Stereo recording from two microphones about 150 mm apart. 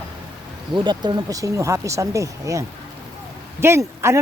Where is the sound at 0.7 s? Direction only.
30° right (ahead or behind).